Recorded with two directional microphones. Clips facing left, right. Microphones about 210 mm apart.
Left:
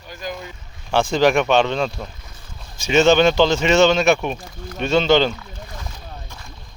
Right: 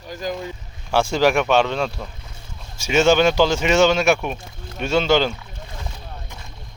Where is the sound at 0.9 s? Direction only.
10° right (ahead or behind).